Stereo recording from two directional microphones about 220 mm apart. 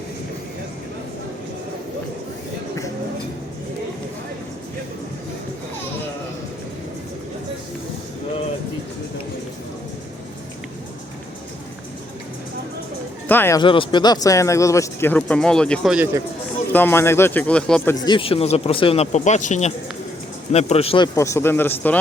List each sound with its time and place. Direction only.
13.2 s speech: 10° left (ahead or behind)
13.6 s speech: 20° left (ahead or behind); by 16.0 s centre (ahead or behind)
16.7 s speech: 10° left (ahead or behind)
18.0 s speech: 25° left (ahead or behind)
21.2 s speech: 15° left (ahead or behind)